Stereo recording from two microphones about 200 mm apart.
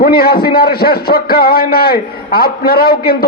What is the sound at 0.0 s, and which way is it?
A man's voice, 50° left (ahead or behind).